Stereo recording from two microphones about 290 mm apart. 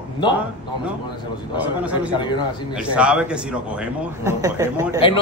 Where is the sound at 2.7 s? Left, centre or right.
Centre.